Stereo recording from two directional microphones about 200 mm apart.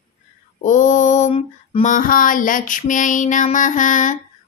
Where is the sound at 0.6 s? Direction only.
40° left (ahead or behind).